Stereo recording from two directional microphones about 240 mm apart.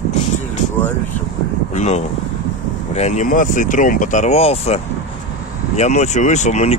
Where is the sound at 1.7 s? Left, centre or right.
Left.